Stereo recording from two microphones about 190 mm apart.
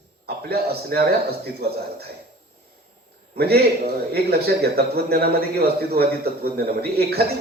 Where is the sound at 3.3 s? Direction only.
55° right (ahead or behind).